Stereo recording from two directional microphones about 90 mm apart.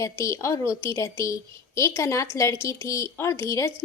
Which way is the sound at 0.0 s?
35° left (ahead or behind).